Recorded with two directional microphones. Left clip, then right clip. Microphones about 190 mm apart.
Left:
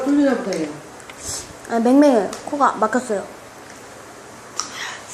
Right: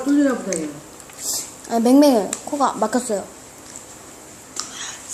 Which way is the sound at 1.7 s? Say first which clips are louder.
Even; 25° right (ahead or behind).